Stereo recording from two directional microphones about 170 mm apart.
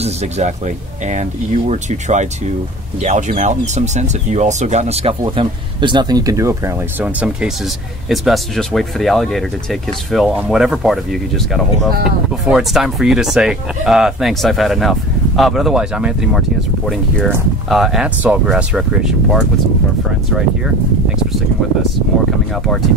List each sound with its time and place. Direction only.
0.0 s speech: 40° right (ahead or behind)
1.7 s speech: 45° right (ahead or behind); by 19.4 s 5° right (ahead or behind)